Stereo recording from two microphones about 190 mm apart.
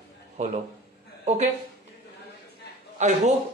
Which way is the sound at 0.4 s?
40° right (ahead or behind).